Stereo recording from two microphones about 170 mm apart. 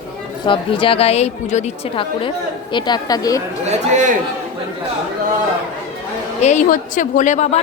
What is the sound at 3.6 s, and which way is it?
Speech, 45° right (ahead or behind).